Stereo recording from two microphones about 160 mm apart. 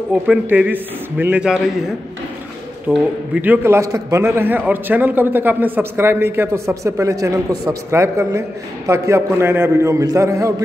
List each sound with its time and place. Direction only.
0.1 s a man's voice: 10° right (ahead or behind)
2.9 s a man's voice: 10° right (ahead or behind)